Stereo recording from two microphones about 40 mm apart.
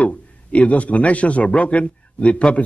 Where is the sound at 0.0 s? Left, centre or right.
Left.